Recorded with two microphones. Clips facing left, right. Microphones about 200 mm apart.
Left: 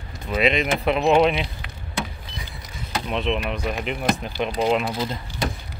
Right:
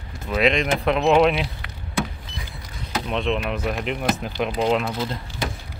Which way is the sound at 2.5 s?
Centre (ahead or behind).